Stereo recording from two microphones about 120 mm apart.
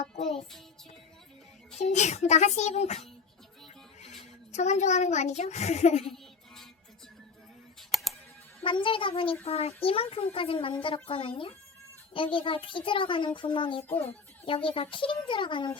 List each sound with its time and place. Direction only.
1.8 s a child's voice: 75° left (ahead or behind)
7.8 s typing: centre (ahead or behind)
8.6 s a child's voice: 45° left (ahead or behind)
9.4 s a child's voice: 55° left (ahead or behind)
13.8 s a child's voice: 15° left (ahead or behind)
14.4 s a child's voice: 50° left (ahead or behind)